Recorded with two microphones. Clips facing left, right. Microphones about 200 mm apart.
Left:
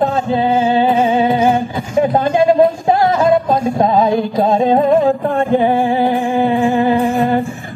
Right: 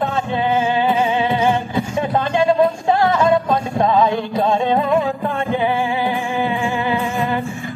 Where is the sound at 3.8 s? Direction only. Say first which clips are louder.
Left 2 dB; 35° left (ahead or behind).